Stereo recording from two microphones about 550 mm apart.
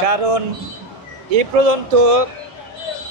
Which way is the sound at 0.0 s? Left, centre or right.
Right.